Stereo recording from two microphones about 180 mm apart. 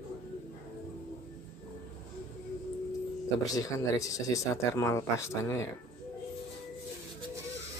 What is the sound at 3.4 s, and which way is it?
Speech, 20° left (ahead or behind).